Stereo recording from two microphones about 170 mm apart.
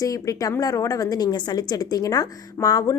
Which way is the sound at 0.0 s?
20° left (ahead or behind).